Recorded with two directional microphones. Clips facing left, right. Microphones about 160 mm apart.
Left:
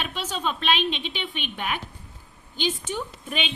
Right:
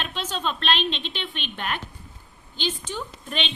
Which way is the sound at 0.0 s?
10° left (ahead or behind).